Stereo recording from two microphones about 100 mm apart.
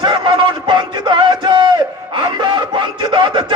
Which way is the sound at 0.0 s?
55° right (ahead or behind).